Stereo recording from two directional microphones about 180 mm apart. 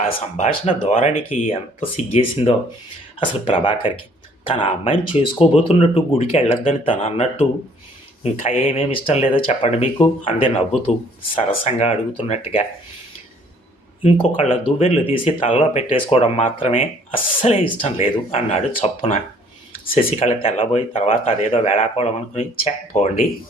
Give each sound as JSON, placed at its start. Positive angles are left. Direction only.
{"t": 0.0, "sound": "speech", "side_deg": 35}
{"t": 14.0, "sound": "speech", "side_deg": 35}